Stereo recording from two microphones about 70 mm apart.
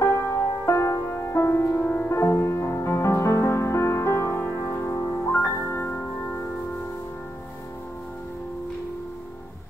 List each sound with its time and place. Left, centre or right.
0.0 s music: left
1.8 s music: centre
2.0 s music: left
5.3 s music: left